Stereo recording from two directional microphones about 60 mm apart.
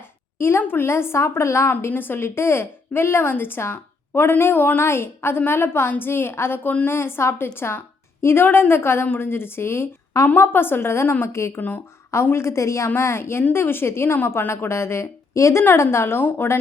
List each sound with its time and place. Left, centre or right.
0.3 s a woman's voice: left
1.9 s a woman's voice: left
4.8 s a woman's voice: left